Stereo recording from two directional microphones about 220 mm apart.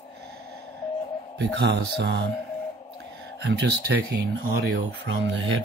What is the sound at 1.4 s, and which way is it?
Speech, 50° right (ahead or behind).